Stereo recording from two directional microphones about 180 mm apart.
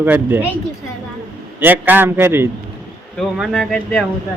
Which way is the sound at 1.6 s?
10° right (ahead or behind).